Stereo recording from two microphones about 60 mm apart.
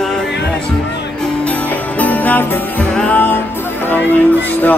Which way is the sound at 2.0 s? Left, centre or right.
Left.